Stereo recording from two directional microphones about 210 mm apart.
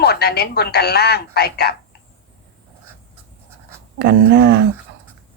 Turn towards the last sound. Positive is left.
turn(degrees=-55)  # may be behind; listen again after turning